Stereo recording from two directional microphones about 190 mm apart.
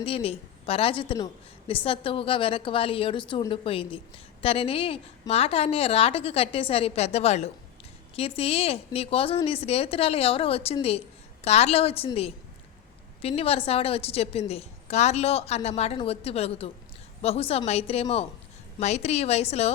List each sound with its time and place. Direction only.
0.0 s a woman's voice: 30° left (ahead or behind)